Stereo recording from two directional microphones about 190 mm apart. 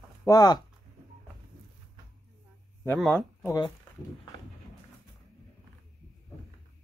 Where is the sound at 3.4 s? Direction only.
20° left (ahead or behind).